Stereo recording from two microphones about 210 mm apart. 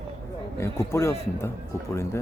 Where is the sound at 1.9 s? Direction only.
10° left (ahead or behind).